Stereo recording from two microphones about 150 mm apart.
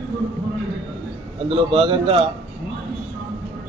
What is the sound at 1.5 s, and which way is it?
Speech, 35° right (ahead or behind).